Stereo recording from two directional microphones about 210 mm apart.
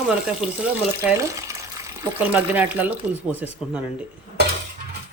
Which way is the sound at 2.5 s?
10° right (ahead or behind).